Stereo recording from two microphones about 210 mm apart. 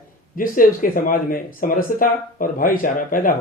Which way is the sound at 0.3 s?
40° left (ahead or behind).